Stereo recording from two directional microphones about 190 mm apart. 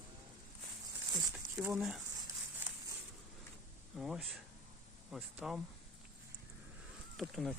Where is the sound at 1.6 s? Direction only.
Centre (ahead or behind).